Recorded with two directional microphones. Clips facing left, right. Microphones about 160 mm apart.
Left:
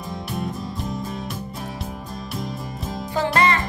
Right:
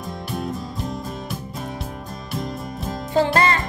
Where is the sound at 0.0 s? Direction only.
Centre (ahead or behind).